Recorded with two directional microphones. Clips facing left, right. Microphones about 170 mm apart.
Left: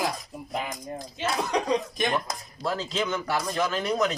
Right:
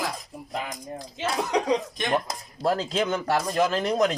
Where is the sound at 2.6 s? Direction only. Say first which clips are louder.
Right 4 dB; 50° right (ahead or behind).